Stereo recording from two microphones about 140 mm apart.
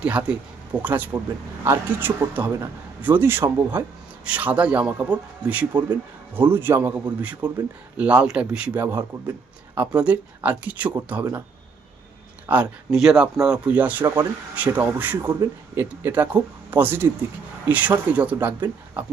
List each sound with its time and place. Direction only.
0.0 s speech: 5° right (ahead or behind)
12.5 s speech: 5° right (ahead or behind)